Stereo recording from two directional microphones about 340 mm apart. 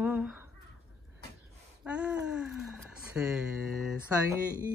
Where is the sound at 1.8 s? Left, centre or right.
Centre.